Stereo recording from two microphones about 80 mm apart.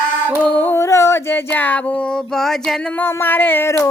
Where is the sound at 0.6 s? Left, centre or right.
Left.